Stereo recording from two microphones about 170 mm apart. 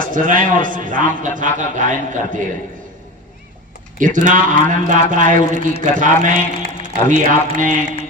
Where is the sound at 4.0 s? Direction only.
50° right (ahead or behind).